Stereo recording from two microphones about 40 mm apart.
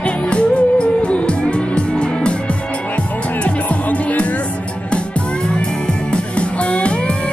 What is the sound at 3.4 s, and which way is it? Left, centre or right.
Music, left.